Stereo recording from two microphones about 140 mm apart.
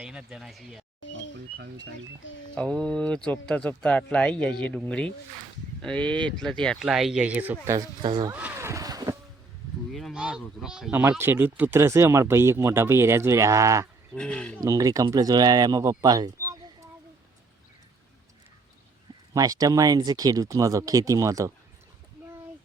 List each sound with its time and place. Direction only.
0.0 s speech: 5° right (ahead or behind)
2.6 s speech: 5° left (ahead or behind); by 7.5 s 10° right (ahead or behind)
8.0 s speech: 30° right (ahead or behind)
8.3 s speech: 10° right (ahead or behind)
9.9 s speech: centre (ahead or behind)
11.2 s speech: 15° right (ahead or behind)
14.2 s speech: 5° left (ahead or behind)
14.6 s speech: 25° right (ahead or behind)
19.3 s speech: 25° right (ahead or behind)